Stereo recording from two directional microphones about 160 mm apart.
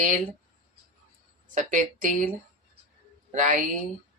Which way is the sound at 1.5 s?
50° right (ahead or behind).